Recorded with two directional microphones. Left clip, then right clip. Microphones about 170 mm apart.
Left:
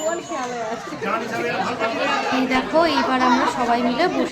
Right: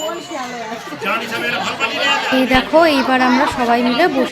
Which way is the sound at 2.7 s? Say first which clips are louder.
Right 5 dB; 30° right (ahead or behind).